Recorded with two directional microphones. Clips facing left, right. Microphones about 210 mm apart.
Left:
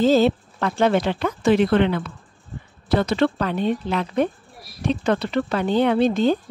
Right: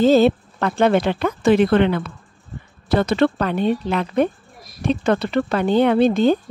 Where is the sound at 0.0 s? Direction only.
60° right (ahead or behind).